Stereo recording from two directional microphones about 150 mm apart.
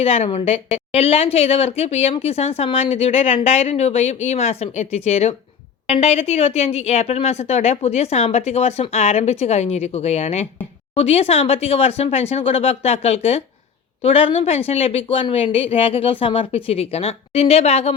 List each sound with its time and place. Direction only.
0.0 s a woman's voice: 40° left (ahead or behind)